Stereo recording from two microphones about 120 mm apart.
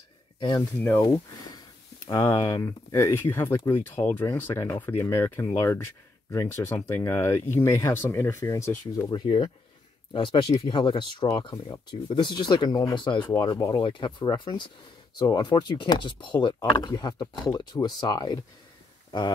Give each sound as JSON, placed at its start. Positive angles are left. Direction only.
{"t": 0.6, "sound": "speech", "side_deg": 15}
{"t": 1.0, "sound": "speech", "side_deg": 30}
{"t": 9.1, "sound": "speech", "side_deg": 40}